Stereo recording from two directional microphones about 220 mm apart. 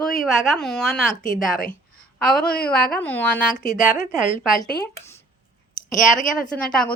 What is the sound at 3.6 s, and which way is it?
Speech, 40° left (ahead or behind).